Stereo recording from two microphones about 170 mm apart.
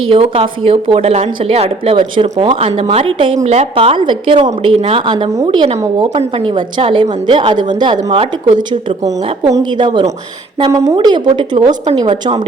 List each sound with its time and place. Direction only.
0.0 s a woman's voice: 35° right (ahead or behind)